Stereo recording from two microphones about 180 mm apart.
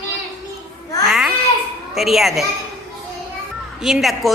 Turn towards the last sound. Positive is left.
turn(degrees=0)  # may be behind; listen again after turning